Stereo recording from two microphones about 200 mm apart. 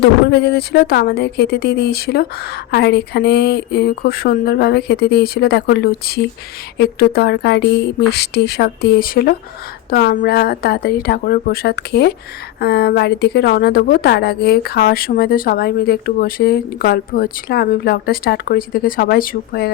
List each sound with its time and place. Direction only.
0.0 s a woman's voice: 55° left (ahead or behind)